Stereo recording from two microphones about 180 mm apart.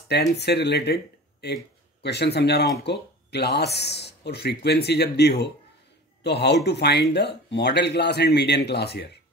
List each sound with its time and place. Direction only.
0.1 s speech: 70° left (ahead or behind)